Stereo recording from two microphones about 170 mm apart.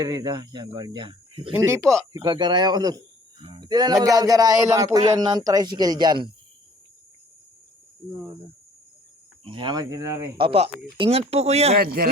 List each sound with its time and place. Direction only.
0.0 s speech: 20° right (ahead or behind)
1.5 s speech: 15° right (ahead or behind)
2.1 s speech: 25° right (ahead or behind)
9.4 s speech: 30° right (ahead or behind)
10.3 s speech: 30° right (ahead or behind)
11.8 s a man's voice: 60° right (ahead or behind)